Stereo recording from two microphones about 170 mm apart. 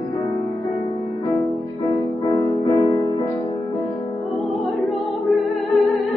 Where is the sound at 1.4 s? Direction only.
20° left (ahead or behind).